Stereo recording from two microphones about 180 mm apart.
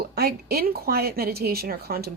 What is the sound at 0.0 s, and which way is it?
Speech, 60° right (ahead or behind).